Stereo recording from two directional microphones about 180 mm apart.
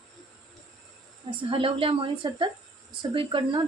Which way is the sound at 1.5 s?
30° right (ahead or behind).